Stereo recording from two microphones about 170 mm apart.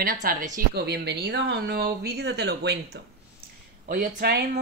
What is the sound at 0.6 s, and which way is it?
Speech, 70° right (ahead or behind).